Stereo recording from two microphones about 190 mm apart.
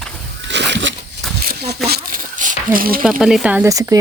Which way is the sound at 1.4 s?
50° right (ahead or behind).